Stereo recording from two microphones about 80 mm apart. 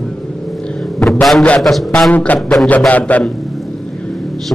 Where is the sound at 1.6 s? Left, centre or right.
Centre.